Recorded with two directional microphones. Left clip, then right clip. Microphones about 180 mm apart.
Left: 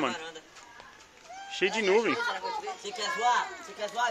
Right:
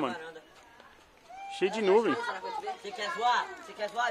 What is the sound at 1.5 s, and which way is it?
Speech, 25° right (ahead or behind).